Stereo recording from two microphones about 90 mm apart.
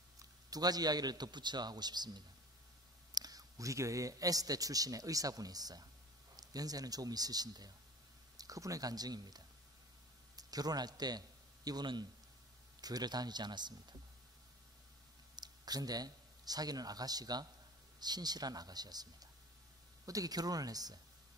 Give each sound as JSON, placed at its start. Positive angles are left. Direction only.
{"t": 0.2, "sound": "a man's voice", "side_deg": -45}
{"t": 15.3, "sound": "a man's voice", "side_deg": -50}